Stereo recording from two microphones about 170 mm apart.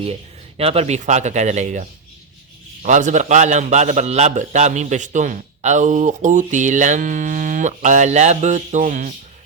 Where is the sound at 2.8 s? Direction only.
45° right (ahead or behind).